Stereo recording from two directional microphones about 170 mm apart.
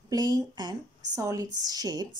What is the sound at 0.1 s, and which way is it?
Speech, 25° right (ahead or behind).